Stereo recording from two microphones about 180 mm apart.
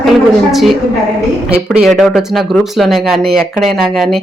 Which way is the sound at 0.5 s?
Centre (ahead or behind).